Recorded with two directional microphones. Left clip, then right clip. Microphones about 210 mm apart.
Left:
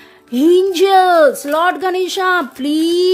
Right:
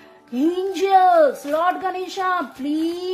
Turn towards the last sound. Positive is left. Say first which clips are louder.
# left 10 dB
turn(degrees=45)  # may be behind; listen again after turning